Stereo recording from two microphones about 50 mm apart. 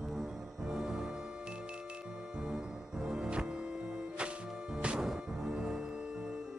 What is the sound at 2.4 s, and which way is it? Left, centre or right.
Music, centre.